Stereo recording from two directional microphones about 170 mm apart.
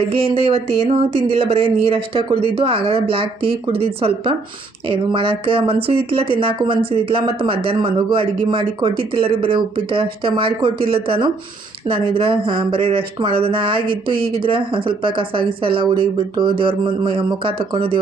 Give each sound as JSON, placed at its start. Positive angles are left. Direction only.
{"t": 0.1, "sound": "speech", "side_deg": -35}
{"t": 13.8, "sound": "speech", "side_deg": -60}
{"t": 14.4, "sound": "speech", "side_deg": -30}